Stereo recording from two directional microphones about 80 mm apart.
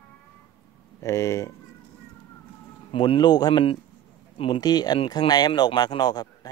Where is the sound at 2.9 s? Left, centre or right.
Left.